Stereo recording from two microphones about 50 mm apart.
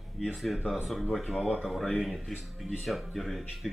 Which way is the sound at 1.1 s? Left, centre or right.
Centre.